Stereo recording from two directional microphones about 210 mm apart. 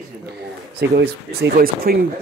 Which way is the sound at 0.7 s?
50° right (ahead or behind).